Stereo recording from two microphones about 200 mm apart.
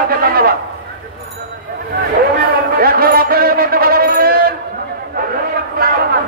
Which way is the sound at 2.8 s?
50° right (ahead or behind).